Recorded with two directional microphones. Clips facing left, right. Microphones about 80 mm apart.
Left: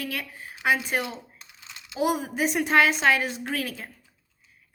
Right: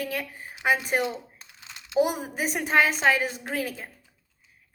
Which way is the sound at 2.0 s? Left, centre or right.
Right.